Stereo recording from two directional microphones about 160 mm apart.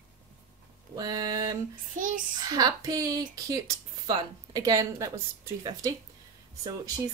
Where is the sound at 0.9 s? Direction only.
25° right (ahead or behind).